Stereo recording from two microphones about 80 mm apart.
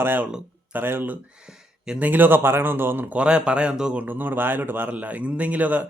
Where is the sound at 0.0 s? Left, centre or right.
Right.